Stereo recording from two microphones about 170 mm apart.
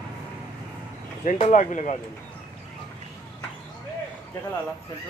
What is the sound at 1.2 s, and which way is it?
Speech, 45° left (ahead or behind).